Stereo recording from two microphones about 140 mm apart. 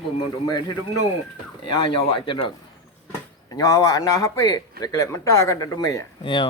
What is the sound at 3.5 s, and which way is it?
Speech, 25° left (ahead or behind).